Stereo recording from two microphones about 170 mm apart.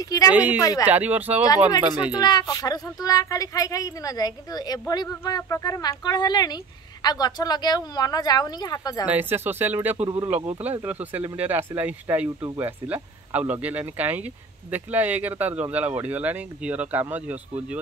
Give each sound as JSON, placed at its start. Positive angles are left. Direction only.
{"t": 0.0, "sound": "a woman's voice", "side_deg": 20}
{"t": 0.3, "sound": "speech", "side_deg": -10}
{"t": 0.6, "sound": "a woman's voice", "side_deg": 20}
{"t": 0.8, "sound": "speech", "side_deg": -10}
{"t": 2.1, "sound": "a woman's voice", "side_deg": 25}
{"t": 9.0, "sound": "speech", "side_deg": -10}